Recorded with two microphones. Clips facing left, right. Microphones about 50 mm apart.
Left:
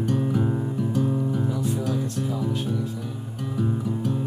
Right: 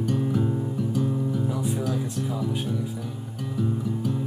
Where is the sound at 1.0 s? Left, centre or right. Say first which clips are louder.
Left 2 dB; centre.